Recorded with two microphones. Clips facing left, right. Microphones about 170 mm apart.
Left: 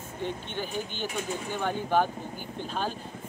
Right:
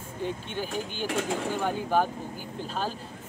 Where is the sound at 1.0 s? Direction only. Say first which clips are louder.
Right 8 dB; 90° right.